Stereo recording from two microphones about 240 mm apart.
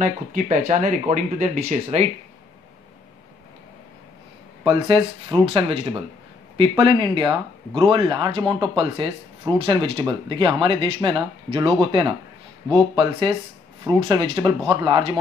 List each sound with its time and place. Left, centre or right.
0.0 s speech: right
4.6 s speech: right